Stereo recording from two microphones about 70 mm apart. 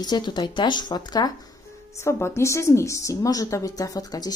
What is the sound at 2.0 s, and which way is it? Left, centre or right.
Speech, left.